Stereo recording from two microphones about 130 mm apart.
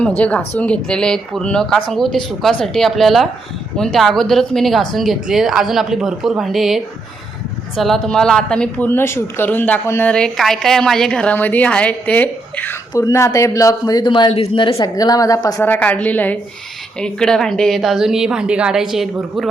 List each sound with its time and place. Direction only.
0.2 s a woman's voice: 10° left (ahead or behind)
10.1 s a woman's voice: 5° left (ahead or behind)
12.9 s a man's voice: 25° left (ahead or behind); by 14.8 s 45° left (ahead or behind)
14.8 s a man's voice: 30° left (ahead or behind)
15.6 s a woman's voice: 15° left (ahead or behind); by 19.5 s 5° right (ahead or behind)